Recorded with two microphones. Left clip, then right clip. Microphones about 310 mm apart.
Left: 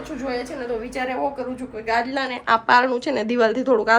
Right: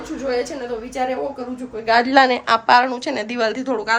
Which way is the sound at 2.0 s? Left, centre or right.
Right.